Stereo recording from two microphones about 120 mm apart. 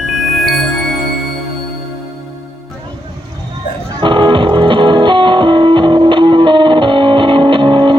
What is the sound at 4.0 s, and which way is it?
Music, 40° right (ahead or behind).